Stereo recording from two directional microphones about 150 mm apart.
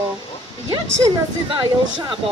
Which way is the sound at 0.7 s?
30° right (ahead or behind).